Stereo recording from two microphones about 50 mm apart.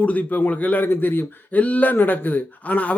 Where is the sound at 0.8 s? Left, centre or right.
Left.